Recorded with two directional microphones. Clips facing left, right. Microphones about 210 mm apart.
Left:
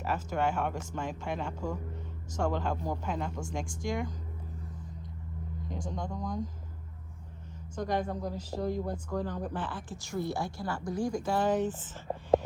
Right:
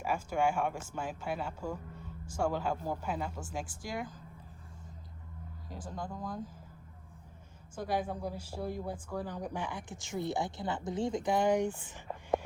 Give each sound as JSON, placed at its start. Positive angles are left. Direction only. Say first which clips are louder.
{"t": 0.0, "sound": "speech", "louder": "even", "side_deg": -10}
{"t": 5.6, "sound": "speech", "louder": "left 3 dB", "side_deg": -5}
{"t": 7.8, "sound": "speech", "louder": "left 2 dB", "side_deg": -5}
{"t": 12.1, "sound": "a sound", "louder": "left 6 dB", "side_deg": 35}